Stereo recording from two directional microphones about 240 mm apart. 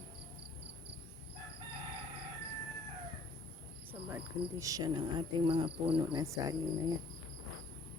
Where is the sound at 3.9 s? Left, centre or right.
Centre.